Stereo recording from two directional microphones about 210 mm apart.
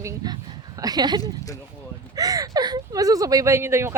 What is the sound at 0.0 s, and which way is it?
Speech, 15° right (ahead or behind).